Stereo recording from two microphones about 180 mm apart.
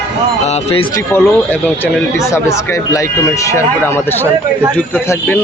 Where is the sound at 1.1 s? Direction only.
15° left (ahead or behind).